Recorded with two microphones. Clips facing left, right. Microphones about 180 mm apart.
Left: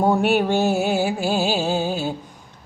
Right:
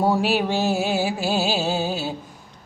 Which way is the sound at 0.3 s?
55° left (ahead or behind).